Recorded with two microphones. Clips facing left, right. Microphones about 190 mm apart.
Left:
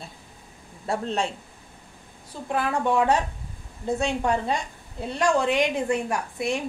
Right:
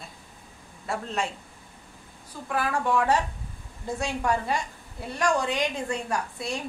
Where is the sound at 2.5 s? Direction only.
20° left (ahead or behind).